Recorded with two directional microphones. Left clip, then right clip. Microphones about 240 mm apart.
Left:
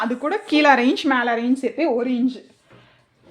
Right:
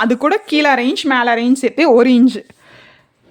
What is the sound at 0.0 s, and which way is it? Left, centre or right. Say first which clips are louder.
Speech: right 9 dB; right.